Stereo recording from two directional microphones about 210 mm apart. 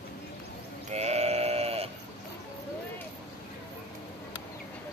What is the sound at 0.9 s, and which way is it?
Sheep, 30° right (ahead or behind).